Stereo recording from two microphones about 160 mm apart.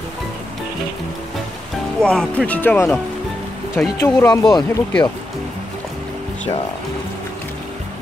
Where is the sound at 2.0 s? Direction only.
5° left (ahead or behind).